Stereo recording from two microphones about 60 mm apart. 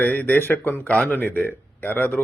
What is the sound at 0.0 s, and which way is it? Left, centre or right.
Speech, left.